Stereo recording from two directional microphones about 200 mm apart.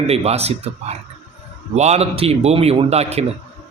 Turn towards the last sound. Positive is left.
turn(degrees=-30)  # may be behind; listen again after turning